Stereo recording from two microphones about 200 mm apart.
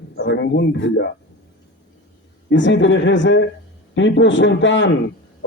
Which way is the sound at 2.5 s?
65° left (ahead or behind).